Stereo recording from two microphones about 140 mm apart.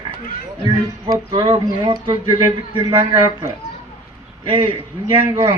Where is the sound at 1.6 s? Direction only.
30° right (ahead or behind).